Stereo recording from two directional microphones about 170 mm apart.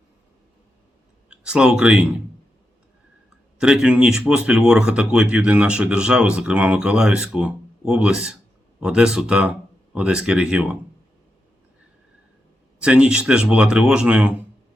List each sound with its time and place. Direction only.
1.3 s speech: 5° right (ahead or behind)
3.6 s speech: 5° right (ahead or behind)
12.8 s speech: 5° right (ahead or behind)